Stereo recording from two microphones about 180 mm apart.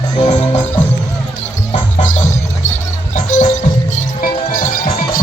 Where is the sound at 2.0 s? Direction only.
45° left (ahead or behind).